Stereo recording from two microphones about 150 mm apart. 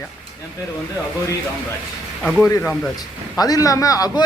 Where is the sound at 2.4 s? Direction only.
15° left (ahead or behind).